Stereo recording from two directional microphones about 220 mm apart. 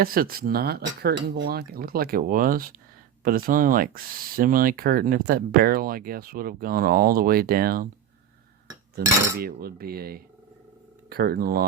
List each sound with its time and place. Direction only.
0.0 s speech: 40° right (ahead or behind)
9.0 s speech: 45° right (ahead or behind)